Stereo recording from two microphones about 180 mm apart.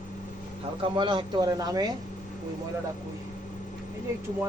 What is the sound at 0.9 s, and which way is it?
Speech, 25° right (ahead or behind).